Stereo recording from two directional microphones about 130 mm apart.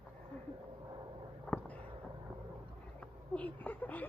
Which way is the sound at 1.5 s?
10° left (ahead or behind).